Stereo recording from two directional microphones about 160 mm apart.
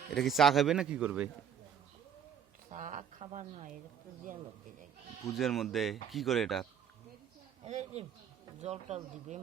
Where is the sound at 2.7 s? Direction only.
50° right (ahead or behind).